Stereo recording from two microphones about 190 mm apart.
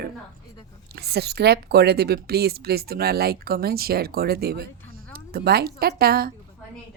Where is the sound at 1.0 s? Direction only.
60° right (ahead or behind).